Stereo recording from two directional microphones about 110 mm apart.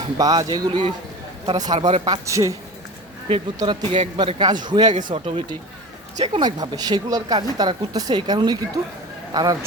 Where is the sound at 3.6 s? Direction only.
45° right (ahead or behind).